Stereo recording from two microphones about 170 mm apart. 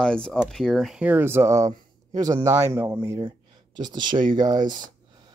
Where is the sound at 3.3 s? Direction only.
25° right (ahead or behind).